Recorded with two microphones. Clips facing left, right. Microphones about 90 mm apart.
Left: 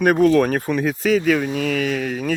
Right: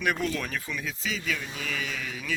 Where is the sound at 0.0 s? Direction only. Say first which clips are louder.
Left 14 dB; 45° left (ahead or behind).